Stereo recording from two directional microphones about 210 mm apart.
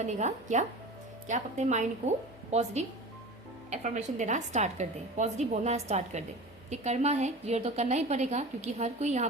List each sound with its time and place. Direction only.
0.0 s a woman's voice: 35° right (ahead or behind)